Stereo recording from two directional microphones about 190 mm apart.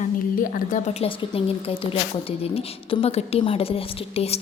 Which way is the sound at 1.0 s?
30° left (ahead or behind).